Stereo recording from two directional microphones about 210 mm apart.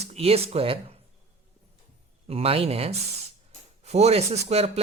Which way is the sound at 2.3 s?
30° right (ahead or behind).